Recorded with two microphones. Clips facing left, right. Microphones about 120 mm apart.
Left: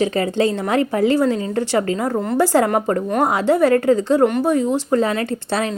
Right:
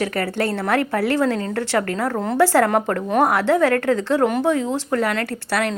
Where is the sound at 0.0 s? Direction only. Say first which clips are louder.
Left 4 dB; 20° left (ahead or behind).